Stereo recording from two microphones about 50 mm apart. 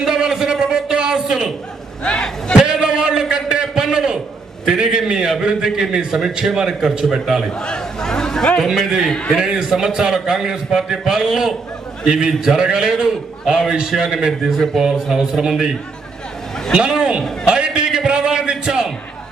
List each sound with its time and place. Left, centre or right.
0.0 s a sound: centre
2.0 s a man's voice: centre
2.6 s a sound: centre
4.6 s a man's voice: centre
7.6 s speech: centre
8.6 s a man's voice: centre
9.0 s a man's voice: centre
9.4 s a man's voice: centre
16.7 s a man's voice: centre
17.4 s a sound: centre